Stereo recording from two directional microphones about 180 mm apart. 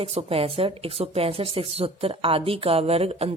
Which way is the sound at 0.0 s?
30° right (ahead or behind).